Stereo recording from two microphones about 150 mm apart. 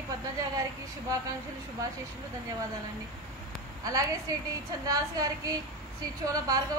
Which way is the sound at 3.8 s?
25° right (ahead or behind).